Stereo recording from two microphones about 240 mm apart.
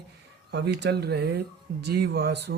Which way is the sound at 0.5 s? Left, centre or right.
Right.